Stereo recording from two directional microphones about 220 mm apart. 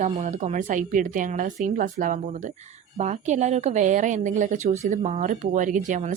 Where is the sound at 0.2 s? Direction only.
30° right (ahead or behind).